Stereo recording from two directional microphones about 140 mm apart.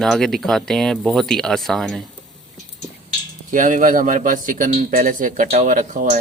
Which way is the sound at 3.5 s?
65° right (ahead or behind).